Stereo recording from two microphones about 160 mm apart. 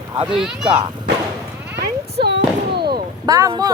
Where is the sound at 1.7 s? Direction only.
90° right.